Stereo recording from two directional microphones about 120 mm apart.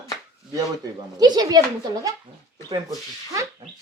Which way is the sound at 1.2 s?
35° right (ahead or behind).